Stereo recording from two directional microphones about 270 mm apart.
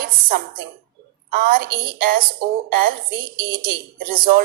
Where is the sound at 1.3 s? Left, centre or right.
Right.